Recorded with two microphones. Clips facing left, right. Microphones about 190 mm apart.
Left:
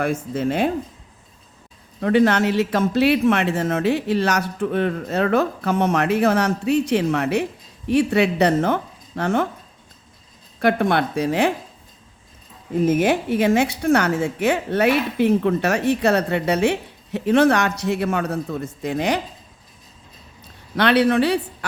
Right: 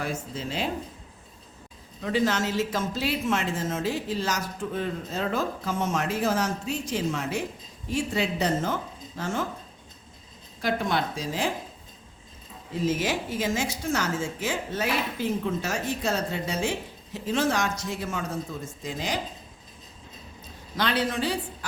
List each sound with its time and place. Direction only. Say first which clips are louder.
0.0 s a woman's voice: left 10 dB; 60° left (ahead or behind)
2.0 s a woman's voice: left 9 dB; 65° left (ahead or behind)
10.6 s a woman's voice: left 8 dB; 60° left (ahead or behind)
12.7 s a woman's voice: left 9 dB; 55° left (ahead or behind)
20.7 s a woman's voice: left 10 dB; 65° left (ahead or behind)